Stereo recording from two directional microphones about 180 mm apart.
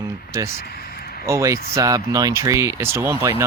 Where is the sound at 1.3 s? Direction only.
15° right (ahead or behind).